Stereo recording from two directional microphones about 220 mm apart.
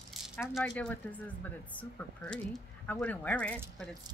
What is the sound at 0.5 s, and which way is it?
Speech, 5° left (ahead or behind).